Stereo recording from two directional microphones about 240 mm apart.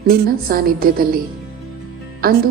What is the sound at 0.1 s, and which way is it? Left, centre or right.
A woman's voice, right.